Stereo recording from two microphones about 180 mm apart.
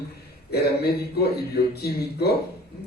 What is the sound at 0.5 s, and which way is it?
A man's voice, 65° left (ahead or behind).